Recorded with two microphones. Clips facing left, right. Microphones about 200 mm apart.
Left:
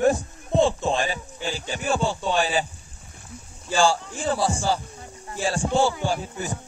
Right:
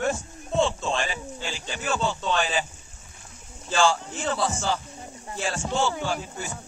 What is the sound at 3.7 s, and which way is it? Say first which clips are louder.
Speech: left 2 dB; 10° left (ahead or behind).